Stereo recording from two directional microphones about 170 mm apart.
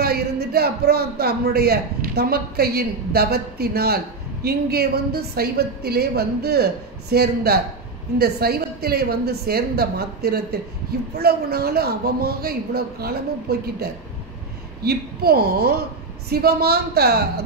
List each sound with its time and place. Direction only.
0.0 s a man's voice: 65° right (ahead or behind)